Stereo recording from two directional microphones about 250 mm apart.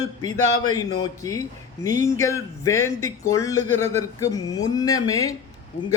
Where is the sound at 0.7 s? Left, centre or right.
Centre.